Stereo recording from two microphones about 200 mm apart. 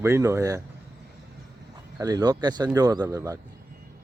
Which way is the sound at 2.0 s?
20° right (ahead or behind).